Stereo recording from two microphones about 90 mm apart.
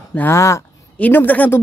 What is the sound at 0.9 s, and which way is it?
Speech, 20° left (ahead or behind).